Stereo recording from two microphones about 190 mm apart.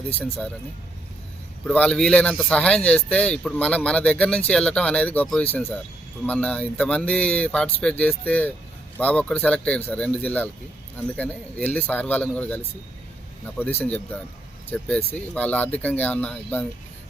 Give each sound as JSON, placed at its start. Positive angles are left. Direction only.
{"t": 0.2, "sound": "speech", "side_deg": 5}
{"t": 1.6, "sound": "speech", "side_deg": 5}
{"t": 13.7, "sound": "speech", "side_deg": 5}